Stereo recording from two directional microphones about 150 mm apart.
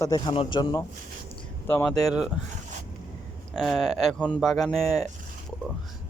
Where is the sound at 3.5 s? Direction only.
Centre (ahead or behind).